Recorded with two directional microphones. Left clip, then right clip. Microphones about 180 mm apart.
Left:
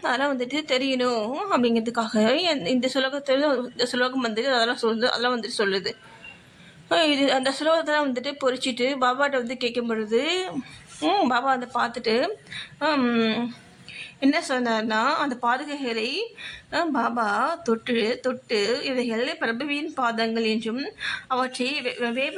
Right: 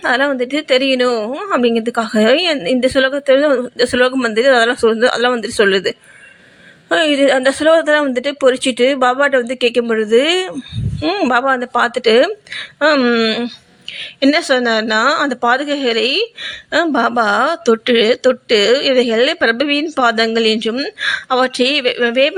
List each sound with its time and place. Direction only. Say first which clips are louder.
0.0 s a woman's voice: right 10 dB; 25° right (ahead or behind)
6.9 s a woman's voice: right 9 dB; 20° right (ahead or behind)